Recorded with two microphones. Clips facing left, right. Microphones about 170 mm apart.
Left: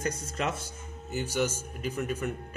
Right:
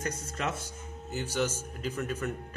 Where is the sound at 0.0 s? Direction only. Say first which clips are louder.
Left 3 dB; 30° left (ahead or behind).